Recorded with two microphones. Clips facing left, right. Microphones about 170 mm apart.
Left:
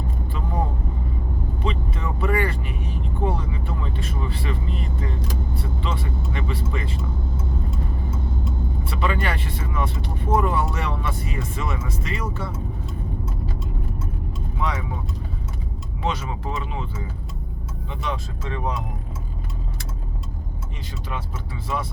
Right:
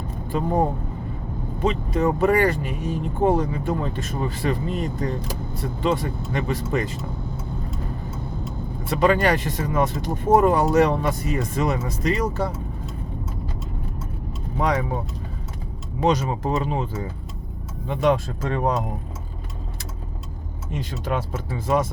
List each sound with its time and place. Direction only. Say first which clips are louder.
0.3 s speech: right 11 dB; 45° right (ahead or behind)
1.6 s speech: right 9 dB; 45° right (ahead or behind)
8.8 s speech: right 8 dB; 45° right (ahead or behind)
14.6 s speech: right 6 dB; 45° right (ahead or behind)
16.0 s speech: right 7 dB; 40° right (ahead or behind)
17.8 s speech: right 10 dB; 50° right (ahead or behind)
21.0 s speech: right 6 dB; 50° right (ahead or behind)